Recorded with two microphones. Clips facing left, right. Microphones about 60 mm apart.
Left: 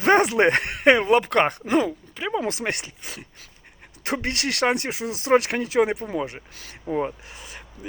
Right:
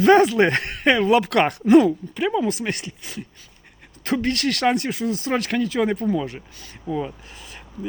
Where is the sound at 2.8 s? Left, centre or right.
Left.